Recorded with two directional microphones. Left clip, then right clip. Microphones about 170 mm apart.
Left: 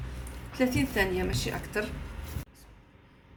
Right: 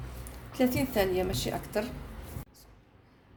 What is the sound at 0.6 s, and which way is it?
A woman's voice, 45° right (ahead or behind).